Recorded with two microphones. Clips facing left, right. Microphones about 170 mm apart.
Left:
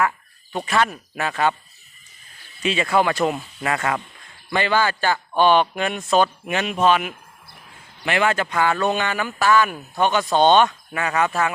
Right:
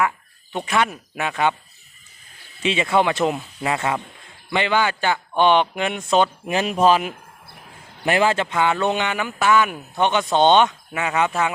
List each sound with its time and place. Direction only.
0.5 s speech: centre (ahead or behind)
0.9 s speech: 15° right (ahead or behind)
2.6 s speech: 25° right (ahead or behind)
6.5 s speech: 35° right (ahead or behind); by 11.3 s 20° right (ahead or behind)